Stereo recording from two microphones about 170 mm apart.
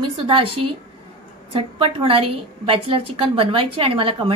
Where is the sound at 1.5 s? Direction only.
30° right (ahead or behind).